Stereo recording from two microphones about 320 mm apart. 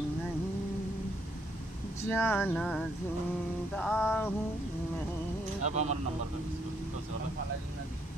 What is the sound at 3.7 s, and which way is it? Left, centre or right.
Music, centre.